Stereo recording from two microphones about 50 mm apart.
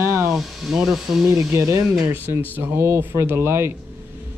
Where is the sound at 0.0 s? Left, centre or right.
Right.